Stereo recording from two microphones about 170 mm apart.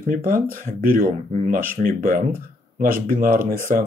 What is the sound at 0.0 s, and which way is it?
Speech, 55° right (ahead or behind).